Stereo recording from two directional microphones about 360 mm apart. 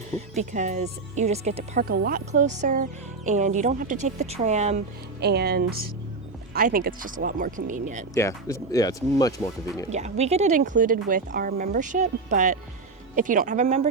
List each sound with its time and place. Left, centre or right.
0.1 s speech: centre
8.1 s speech: centre
9.9 s speech: centre